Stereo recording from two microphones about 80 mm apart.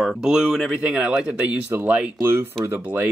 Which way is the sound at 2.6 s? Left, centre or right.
Right.